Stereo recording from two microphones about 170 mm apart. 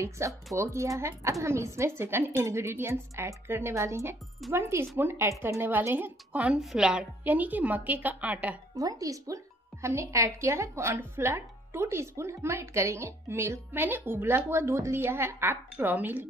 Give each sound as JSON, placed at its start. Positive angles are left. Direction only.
{"t": 0.2, "sound": "speech", "side_deg": -15}
{"t": 8.7, "sound": "speech", "side_deg": -20}